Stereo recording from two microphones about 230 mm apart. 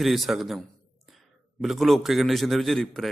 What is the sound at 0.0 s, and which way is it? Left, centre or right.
Speech, centre.